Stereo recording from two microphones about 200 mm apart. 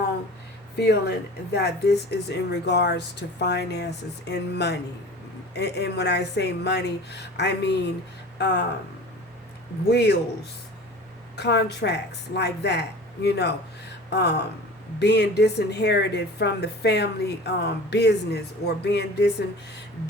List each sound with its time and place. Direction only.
0.8 s speech: 55° left (ahead or behind)
9.9 s speech: 55° left (ahead or behind)
11.3 s speech: 60° left (ahead or behind)